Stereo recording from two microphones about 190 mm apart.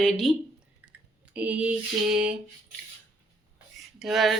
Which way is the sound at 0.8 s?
10° right (ahead or behind).